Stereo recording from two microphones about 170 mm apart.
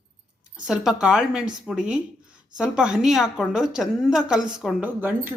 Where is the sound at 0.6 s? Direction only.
5° right (ahead or behind).